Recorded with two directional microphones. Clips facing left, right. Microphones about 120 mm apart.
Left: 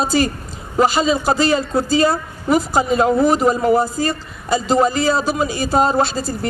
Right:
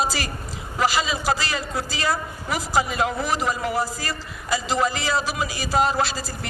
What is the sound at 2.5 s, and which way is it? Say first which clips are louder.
Speech: left 7 dB; 45° left (ahead or behind).